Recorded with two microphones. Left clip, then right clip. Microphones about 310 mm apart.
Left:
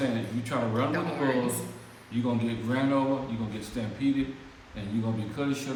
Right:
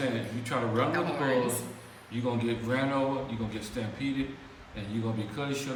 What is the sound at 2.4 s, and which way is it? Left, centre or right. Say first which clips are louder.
A man's voice: even; centre.